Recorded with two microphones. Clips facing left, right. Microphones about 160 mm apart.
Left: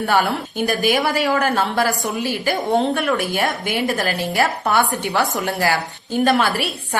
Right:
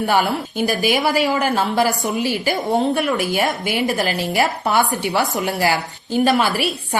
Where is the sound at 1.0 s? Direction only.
5° right (ahead or behind).